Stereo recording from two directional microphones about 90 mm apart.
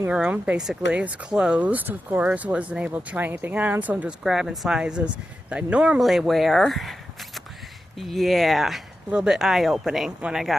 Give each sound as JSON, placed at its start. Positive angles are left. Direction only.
{"t": 0.1, "sound": "speech", "side_deg": -15}
{"t": 4.2, "sound": "speech", "side_deg": -5}
{"t": 6.0, "sound": "speech", "side_deg": 0}